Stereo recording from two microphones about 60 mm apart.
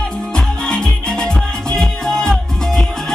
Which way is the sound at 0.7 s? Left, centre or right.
Centre.